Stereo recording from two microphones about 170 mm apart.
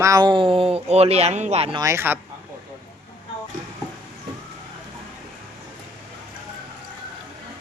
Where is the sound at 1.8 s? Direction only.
15° right (ahead or behind).